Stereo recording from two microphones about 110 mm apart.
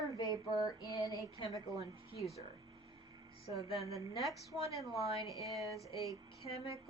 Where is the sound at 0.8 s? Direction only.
30° right (ahead or behind).